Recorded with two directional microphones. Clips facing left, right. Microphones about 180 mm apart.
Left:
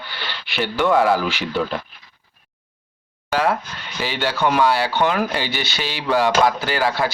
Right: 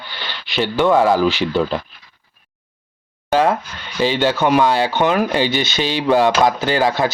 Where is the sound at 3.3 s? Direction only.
25° right (ahead or behind).